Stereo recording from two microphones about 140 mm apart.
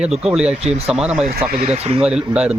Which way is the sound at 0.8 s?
5° right (ahead or behind).